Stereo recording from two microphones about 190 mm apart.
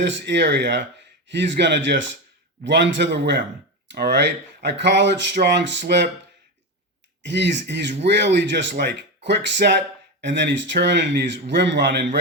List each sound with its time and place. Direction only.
0.0 s speech: 70° right (ahead or behind)
7.2 s speech: 70° right (ahead or behind)